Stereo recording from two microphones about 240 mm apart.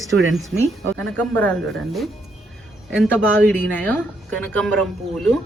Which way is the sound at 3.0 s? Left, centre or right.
Centre.